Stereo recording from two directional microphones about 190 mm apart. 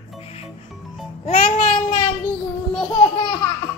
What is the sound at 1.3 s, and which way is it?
Child singing, 30° left (ahead or behind).